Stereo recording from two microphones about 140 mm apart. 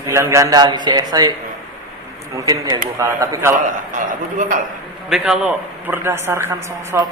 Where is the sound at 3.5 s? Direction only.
65° right (ahead or behind).